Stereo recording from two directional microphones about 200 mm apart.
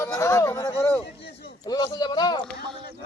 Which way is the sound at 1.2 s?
20° left (ahead or behind).